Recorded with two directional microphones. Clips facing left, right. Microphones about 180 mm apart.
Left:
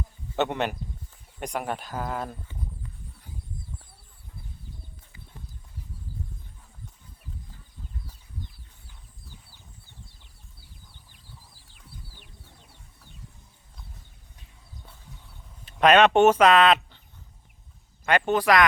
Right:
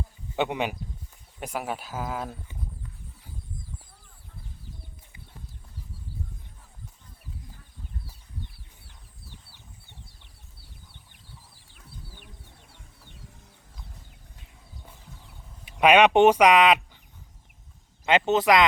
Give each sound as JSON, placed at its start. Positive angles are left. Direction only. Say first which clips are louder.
{"t": 0.3, "sound": "speech", "louder": "left 1 dB", "side_deg": -10}
{"t": 11.1, "sound": "chicken", "louder": "even", "side_deg": -60}
{"t": 15.6, "sound": "speech", "louder": "even", "side_deg": -10}
{"t": 18.0, "sound": "speech", "louder": "right 1 dB", "side_deg": -20}